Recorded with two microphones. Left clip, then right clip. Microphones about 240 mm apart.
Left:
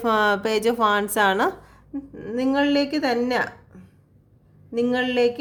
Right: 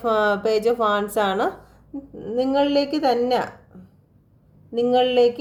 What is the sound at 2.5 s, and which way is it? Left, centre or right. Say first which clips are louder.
Speech: right 1 dB; left.